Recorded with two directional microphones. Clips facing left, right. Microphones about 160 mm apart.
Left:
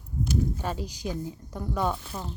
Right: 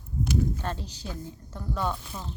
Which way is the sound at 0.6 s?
10° left (ahead or behind).